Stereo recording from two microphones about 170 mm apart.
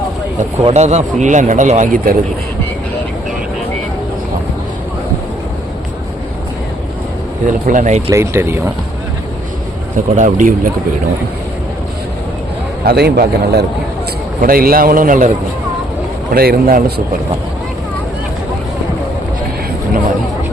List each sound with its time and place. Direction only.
0.7 s speech: 40° right (ahead or behind)
7.4 s speech: 50° right (ahead or behind)
8.1 s speech: 15° right (ahead or behind)
10.2 s speech: 50° right (ahead or behind)
12.8 s a man's voice: 70° right (ahead or behind)
14.4 s a man's voice: 60° right (ahead or behind)
16.3 s a man's voice: 65° right (ahead or behind)